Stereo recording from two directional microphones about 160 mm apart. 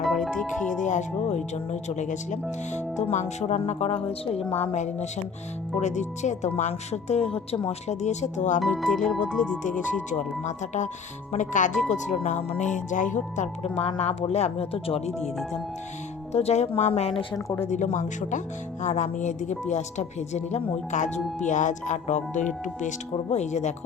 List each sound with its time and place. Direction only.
0.0 s music: centre (ahead or behind)
0.4 s speech: 50° left (ahead or behind)
8.6 s speech: centre (ahead or behind)
10.1 s speech: 50° left (ahead or behind)
16.3 s speech: 40° left (ahead or behind)
17.3 s speech: 15° left (ahead or behind)
17.7 s speech: 50° left (ahead or behind)